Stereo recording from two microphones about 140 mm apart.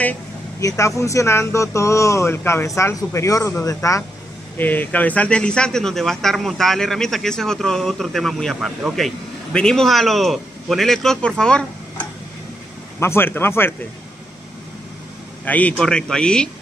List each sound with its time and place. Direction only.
0.6 s speech: 20° left (ahead or behind)
15.4 s speech: 10° left (ahead or behind)